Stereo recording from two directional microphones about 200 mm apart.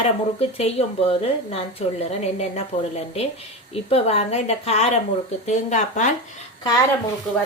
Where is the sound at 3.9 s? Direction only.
30° left (ahead or behind).